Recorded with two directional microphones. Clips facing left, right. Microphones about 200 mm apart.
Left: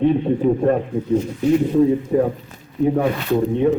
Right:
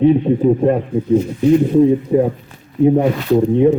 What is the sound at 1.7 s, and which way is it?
A man's voice, 20° right (ahead or behind).